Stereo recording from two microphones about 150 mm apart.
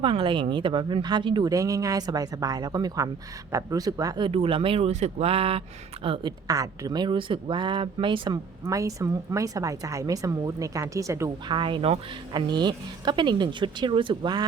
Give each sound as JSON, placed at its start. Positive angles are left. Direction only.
{"t": 0.0, "sound": "speech", "side_deg": -35}
{"t": 4.3, "sound": "speech", "side_deg": -40}
{"t": 6.5, "sound": "speech", "side_deg": -25}
{"t": 8.6, "sound": "speech", "side_deg": -20}
{"t": 11.4, "sound": "speech", "side_deg": -35}